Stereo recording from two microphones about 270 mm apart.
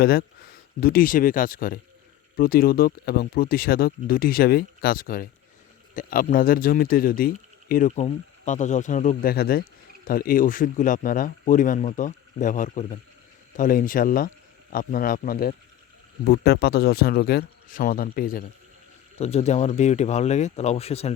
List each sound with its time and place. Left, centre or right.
0.0 s speech: left